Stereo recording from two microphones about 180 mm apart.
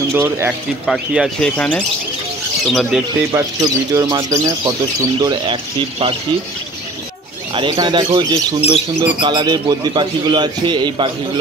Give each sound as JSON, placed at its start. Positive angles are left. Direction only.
{"t": 0.1, "sound": "speech", "side_deg": -15}
{"t": 0.8, "sound": "speech", "side_deg": -5}
{"t": 3.3, "sound": "speech", "side_deg": -15}
{"t": 7.5, "sound": "speech", "side_deg": -25}